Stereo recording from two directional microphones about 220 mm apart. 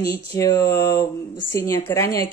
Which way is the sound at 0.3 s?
15° left (ahead or behind).